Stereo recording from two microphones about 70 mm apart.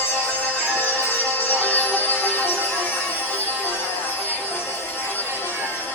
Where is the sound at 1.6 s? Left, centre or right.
Left.